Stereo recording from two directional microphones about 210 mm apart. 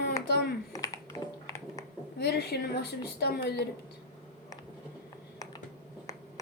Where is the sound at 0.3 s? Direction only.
50° left (ahead or behind).